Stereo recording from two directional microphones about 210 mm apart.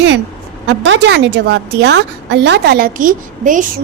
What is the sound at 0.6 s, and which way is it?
A woman's voice, 60° right (ahead or behind).